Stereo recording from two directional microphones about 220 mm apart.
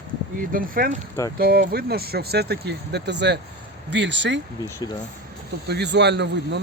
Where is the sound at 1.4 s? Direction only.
45° right (ahead or behind).